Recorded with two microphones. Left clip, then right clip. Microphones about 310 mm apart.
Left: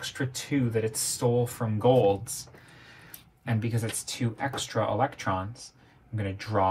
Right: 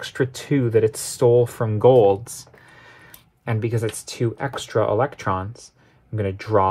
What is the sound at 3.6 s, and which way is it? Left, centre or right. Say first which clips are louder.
Speech: right 9 dB; right.